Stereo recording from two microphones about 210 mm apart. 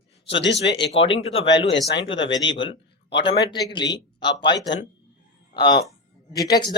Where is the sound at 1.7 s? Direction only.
60° left (ahead or behind).